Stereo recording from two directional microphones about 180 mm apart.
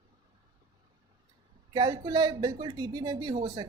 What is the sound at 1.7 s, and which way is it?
Speech, 25° right (ahead or behind).